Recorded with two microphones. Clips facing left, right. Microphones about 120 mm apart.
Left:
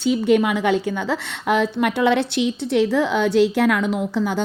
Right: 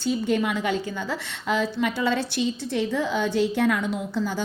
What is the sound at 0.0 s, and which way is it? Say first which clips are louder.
A woman's voice: left 6 dB; 70° left (ahead or behind).